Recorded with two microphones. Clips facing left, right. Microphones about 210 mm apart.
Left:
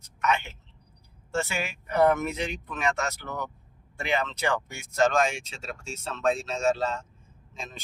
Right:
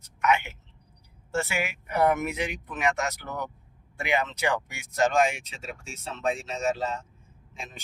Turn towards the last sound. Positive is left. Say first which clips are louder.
# left 1 dB
turn(degrees=-15)  # may be behind; listen again after turning